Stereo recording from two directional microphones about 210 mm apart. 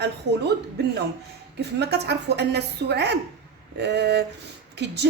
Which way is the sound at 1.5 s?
50° right (ahead or behind).